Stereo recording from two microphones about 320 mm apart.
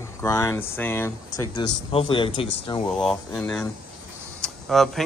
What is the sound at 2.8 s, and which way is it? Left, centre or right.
Speech, centre.